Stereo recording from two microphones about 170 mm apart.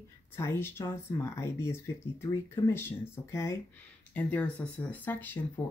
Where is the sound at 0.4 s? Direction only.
15° left (ahead or behind).